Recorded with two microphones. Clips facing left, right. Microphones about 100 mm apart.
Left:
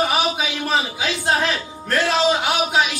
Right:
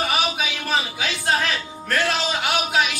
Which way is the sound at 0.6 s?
30° left (ahead or behind).